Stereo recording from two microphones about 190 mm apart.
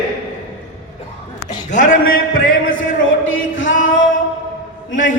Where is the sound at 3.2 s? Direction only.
90° left.